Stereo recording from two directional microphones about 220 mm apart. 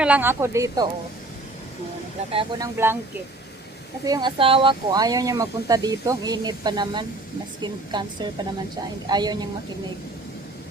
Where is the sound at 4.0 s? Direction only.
20° right (ahead or behind).